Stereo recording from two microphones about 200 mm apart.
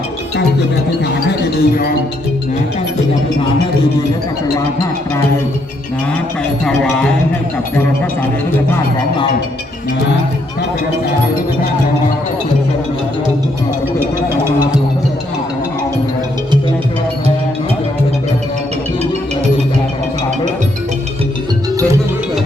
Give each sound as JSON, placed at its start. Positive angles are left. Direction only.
{"t": 1.0, "sound": "speech", "side_deg": 55}
{"t": 6.7, "sound": "speech", "side_deg": 5}